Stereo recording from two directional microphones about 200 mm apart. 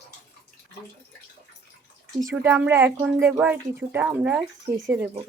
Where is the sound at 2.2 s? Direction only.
15° right (ahead or behind).